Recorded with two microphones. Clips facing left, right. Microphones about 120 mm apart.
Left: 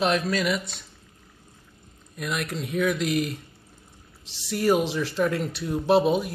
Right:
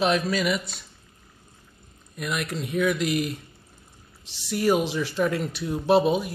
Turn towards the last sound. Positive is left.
turn(degrees=0)  # may be behind; listen again after turning